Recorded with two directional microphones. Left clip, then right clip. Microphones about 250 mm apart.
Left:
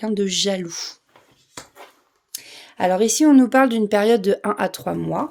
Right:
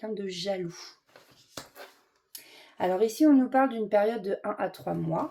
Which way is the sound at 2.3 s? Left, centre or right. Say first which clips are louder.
Left 10 dB; left.